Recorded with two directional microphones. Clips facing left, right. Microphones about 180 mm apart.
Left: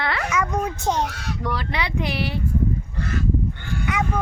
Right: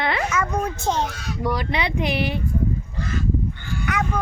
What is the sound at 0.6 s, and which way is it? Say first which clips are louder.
Speech: even; 15° left (ahead or behind).